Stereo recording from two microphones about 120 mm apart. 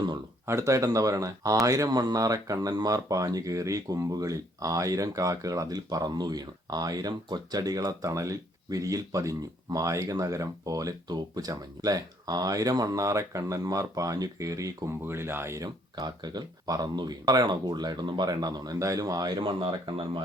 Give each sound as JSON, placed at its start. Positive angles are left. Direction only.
{"t": 0.4, "sound": "speech", "side_deg": -25}